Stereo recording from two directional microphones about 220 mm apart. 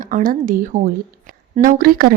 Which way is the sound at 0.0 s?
40° right (ahead or behind).